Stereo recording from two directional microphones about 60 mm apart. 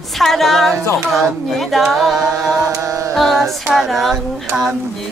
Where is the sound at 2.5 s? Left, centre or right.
Right.